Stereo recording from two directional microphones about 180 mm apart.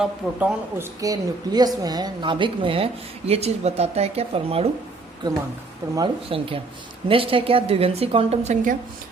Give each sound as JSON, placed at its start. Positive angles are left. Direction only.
{"t": 0.0, "sound": "speech", "side_deg": -10}
{"t": 1.0, "sound": "a woman's voice", "side_deg": -20}
{"t": 5.8, "sound": "speech", "side_deg": -20}
{"t": 6.2, "sound": "a woman's voice", "side_deg": -30}